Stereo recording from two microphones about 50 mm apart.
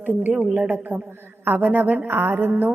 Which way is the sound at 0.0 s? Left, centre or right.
Right.